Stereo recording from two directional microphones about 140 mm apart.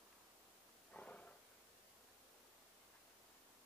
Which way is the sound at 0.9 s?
10° left (ahead or behind).